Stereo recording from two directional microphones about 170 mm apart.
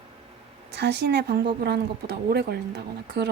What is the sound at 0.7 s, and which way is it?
Speech, 80° right.